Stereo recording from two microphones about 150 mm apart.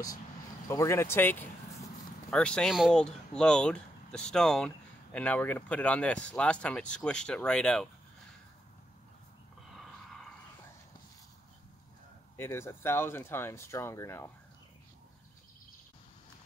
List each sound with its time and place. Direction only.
0.7 s speech: 20° left (ahead or behind)
12.4 s speech: 15° left (ahead or behind)